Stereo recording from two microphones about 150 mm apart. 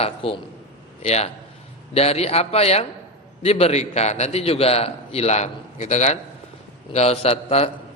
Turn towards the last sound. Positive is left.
turn(degrees=45)  # may be behind; listen again after turning